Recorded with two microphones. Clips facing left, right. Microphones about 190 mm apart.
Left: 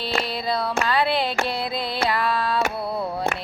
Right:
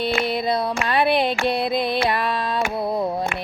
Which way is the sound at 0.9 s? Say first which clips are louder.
Right 5 dB; 20° right (ahead or behind).